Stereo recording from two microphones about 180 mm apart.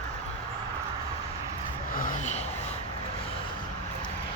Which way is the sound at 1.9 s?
50° left (ahead or behind).